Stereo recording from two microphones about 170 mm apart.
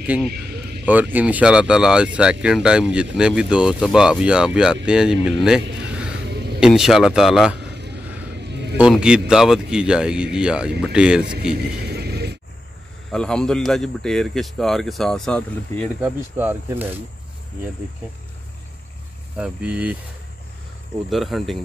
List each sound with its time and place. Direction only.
0.3 s a sound: 65° right (ahead or behind)
0.8 s a man's voice: 10° right (ahead or behind)
5.9 s a sound: 5° right (ahead or behind)
6.2 s a sound: 80° right
6.6 s a man's voice: centre (ahead or behind)
7.7 s vehicle: 80° right
8.4 s a sound: 85° right
8.7 s a man's voice: 5° right (ahead or behind)
11.5 s music: 70° right (ahead or behind)
13.1 s a man's voice: 5° left (ahead or behind)
16.3 s speech: 10° right (ahead or behind)
19.3 s speech: 5° right (ahead or behind)
21.1 s a man's voice: centre (ahead or behind)